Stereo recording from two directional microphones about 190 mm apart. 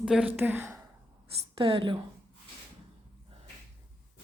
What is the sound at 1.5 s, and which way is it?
Speech, 30° right (ahead or behind).